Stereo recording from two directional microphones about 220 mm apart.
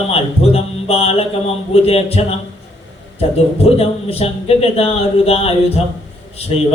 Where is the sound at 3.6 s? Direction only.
25° left (ahead or behind).